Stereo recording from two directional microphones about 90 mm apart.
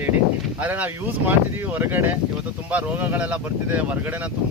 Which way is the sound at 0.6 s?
20° right (ahead or behind).